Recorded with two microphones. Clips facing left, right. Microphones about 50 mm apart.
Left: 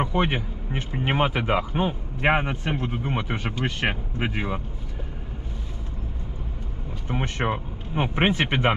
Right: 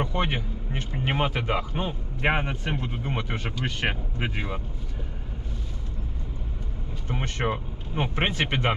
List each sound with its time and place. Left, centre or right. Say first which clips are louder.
0.0 s speech: left 3 dB; centre
7.1 s speech: left 2 dB; centre